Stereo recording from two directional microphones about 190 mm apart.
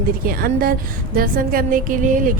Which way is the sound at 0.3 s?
50° right (ahead or behind).